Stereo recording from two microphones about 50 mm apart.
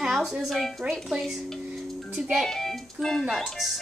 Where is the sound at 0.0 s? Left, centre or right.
Centre.